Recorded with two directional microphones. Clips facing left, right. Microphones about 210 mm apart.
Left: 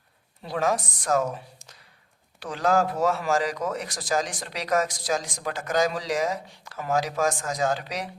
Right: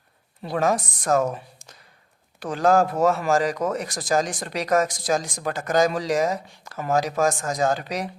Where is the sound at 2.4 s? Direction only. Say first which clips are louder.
Right 4 dB; 45° right (ahead or behind).